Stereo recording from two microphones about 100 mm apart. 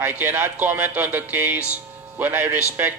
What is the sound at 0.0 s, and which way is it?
A man's voice, 20° right (ahead or behind).